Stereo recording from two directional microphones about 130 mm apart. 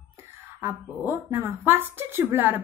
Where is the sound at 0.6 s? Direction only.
20° right (ahead or behind).